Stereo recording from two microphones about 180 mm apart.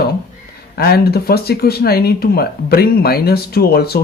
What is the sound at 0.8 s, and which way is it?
A man's voice, 60° left (ahead or behind).